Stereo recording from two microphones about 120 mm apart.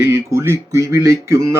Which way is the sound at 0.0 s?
25° right (ahead or behind).